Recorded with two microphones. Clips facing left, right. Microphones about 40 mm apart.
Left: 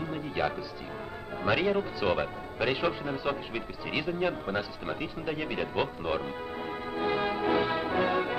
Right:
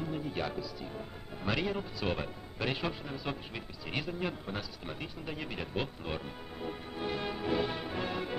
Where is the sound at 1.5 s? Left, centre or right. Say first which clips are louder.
Left 7 dB; centre.